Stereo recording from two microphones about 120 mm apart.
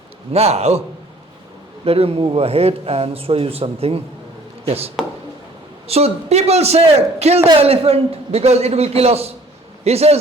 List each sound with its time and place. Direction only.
0.3 s speech: 60° right (ahead or behind)
1.8 s speech: 55° right (ahead or behind)
5.9 s speech: 60° right (ahead or behind)